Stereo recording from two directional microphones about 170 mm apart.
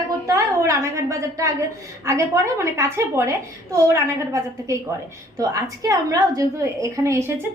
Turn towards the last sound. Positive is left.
turn(degrees=-15)  # may be behind; listen again after turning